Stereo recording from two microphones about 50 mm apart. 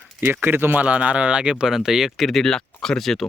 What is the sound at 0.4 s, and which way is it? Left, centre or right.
Speech, right.